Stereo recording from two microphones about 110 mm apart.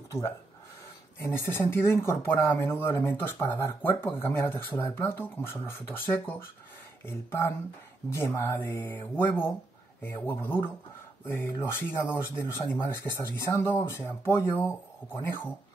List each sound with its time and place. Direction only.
1.2 s speech: 25° left (ahead or behind)